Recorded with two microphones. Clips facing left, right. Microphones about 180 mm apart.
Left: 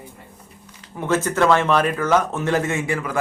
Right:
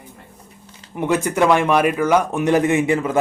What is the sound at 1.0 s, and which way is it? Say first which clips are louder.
Speech: right 2 dB; 15° right (ahead or behind).